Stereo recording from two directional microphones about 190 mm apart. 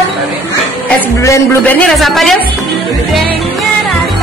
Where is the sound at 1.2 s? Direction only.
10° left (ahead or behind).